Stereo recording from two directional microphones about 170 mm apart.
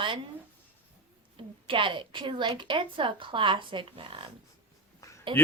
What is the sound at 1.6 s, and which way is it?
A woman's voice, 30° right (ahead or behind).